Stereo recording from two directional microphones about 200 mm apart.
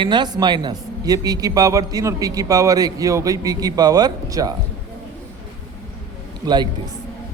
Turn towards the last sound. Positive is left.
turn(degrees=-20)  # may be behind; listen again after turning